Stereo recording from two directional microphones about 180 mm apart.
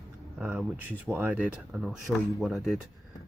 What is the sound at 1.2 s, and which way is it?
Speech, 10° right (ahead or behind).